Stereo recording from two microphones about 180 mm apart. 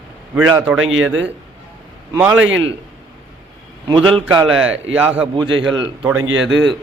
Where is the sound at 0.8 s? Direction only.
90° right.